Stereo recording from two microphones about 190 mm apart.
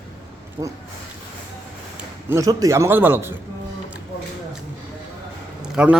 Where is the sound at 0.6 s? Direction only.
20° right (ahead or behind).